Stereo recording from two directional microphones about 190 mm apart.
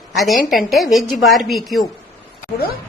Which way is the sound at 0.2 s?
Centre (ahead or behind).